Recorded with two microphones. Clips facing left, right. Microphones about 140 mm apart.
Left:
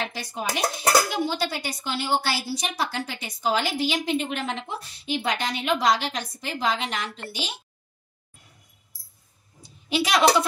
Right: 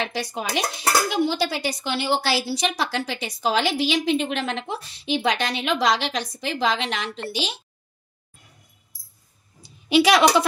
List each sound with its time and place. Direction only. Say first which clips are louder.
0.1 s speech: right 3 dB; 80° right
9.8 s a woman's voice: right 6 dB; 75° right (ahead or behind)